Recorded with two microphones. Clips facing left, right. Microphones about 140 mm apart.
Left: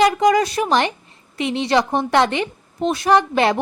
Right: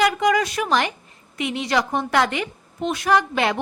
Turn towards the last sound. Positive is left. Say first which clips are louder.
# left 4 dB
turn(degrees=35)  # may be behind; listen again after turning